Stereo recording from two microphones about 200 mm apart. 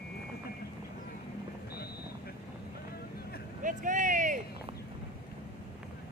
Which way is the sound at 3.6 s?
40° right (ahead or behind).